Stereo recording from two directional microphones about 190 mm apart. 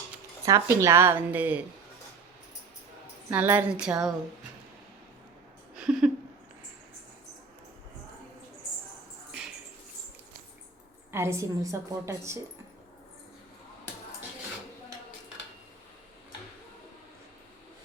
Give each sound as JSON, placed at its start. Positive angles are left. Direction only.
{"t": 0.4, "sound": "a woman's voice", "side_deg": -15}
{"t": 3.2, "sound": "a woman's voice", "side_deg": -10}
{"t": 5.7, "sound": "a sound", "side_deg": -5}
{"t": 11.1, "sound": "a woman's voice", "side_deg": -15}